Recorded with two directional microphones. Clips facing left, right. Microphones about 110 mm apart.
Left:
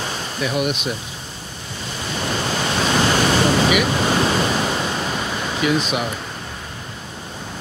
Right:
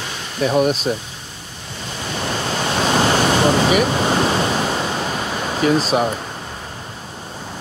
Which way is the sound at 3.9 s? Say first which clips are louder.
Right 1 dB; 25° right (ahead or behind).